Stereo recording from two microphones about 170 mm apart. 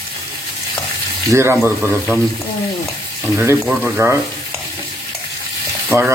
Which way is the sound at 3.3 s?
15° right (ahead or behind).